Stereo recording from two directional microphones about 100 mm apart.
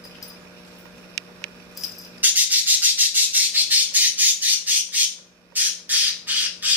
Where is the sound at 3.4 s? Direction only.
15° right (ahead or behind).